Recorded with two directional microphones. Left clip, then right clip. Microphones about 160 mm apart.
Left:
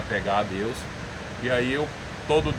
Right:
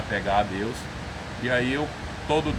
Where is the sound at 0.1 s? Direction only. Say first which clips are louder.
Right 1 dB; 5° right (ahead or behind).